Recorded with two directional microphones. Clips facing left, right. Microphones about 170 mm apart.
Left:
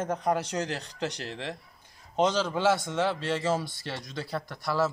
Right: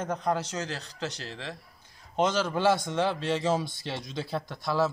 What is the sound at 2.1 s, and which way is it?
Speech, 5° right (ahead or behind).